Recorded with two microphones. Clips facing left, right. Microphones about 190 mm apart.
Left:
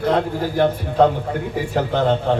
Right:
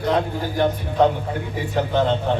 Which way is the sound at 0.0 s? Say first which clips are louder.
Left 2 dB; 55° left (ahead or behind).